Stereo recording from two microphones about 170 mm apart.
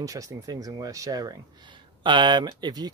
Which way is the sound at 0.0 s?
20° right (ahead or behind).